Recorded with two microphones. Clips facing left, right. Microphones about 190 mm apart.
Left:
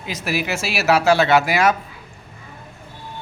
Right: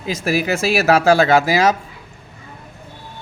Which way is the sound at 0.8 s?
45° right (ahead or behind).